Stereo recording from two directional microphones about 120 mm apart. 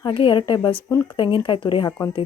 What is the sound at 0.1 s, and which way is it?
A woman's voice, 45° left (ahead or behind).